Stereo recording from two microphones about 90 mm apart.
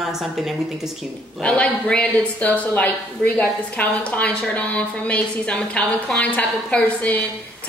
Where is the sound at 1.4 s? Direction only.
10° left (ahead or behind).